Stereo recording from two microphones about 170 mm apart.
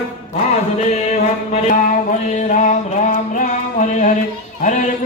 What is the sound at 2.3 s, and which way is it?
Music, 45° left (ahead or behind).